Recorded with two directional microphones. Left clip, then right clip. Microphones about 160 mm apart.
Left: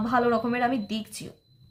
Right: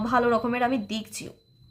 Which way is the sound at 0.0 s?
20° right (ahead or behind).